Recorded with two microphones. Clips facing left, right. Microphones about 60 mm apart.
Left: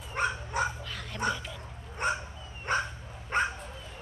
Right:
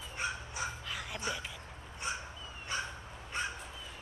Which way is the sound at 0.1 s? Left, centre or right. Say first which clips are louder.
Left 9 dB; left.